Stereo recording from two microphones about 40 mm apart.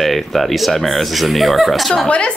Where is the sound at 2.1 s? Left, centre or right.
Left.